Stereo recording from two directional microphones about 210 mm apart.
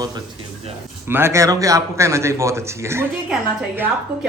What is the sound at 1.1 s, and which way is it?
Dishes, 10° right (ahead or behind).